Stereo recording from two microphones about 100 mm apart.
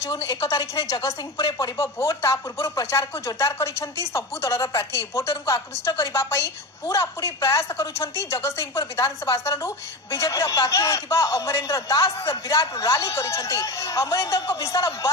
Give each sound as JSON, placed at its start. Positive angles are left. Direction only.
{"t": 0.1, "sound": "speech", "side_deg": 35}